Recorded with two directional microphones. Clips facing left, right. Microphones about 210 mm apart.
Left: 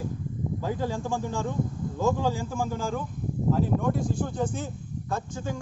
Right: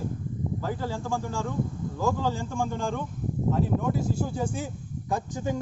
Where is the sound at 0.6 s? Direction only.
15° left (ahead or behind).